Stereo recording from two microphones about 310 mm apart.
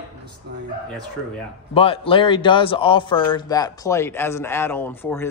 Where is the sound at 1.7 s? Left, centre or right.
Centre.